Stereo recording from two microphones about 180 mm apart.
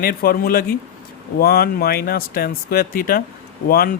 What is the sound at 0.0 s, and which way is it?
Speech, 55° left (ahead or behind).